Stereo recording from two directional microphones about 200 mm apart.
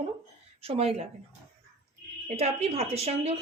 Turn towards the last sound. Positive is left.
turn(degrees=-30)  # may be behind; listen again after turning